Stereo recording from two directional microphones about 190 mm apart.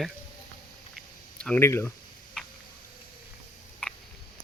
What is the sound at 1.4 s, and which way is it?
Speech, 10° left (ahead or behind).